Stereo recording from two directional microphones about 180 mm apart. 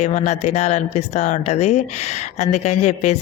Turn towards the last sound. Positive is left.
turn(degrees=40)  # may be behind; listen again after turning